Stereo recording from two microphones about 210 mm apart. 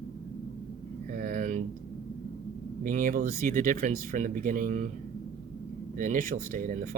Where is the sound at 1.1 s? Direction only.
40° right (ahead or behind).